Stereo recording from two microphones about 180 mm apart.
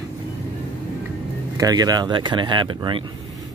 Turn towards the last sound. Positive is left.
turn(degrees=-25)  # may be behind; listen again after turning